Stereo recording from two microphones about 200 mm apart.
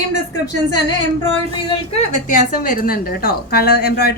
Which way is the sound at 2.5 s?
45° left (ahead or behind).